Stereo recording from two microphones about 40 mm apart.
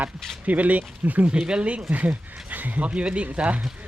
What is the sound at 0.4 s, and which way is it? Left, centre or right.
Speech, right.